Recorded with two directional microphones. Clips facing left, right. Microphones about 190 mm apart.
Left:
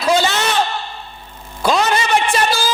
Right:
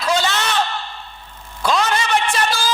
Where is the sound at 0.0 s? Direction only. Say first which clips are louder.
Left 4 dB; 10° left (ahead or behind).